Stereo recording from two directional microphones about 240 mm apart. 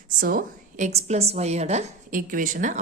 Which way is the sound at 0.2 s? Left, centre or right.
Right.